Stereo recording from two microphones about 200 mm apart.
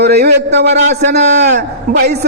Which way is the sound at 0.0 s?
55° right (ahead or behind).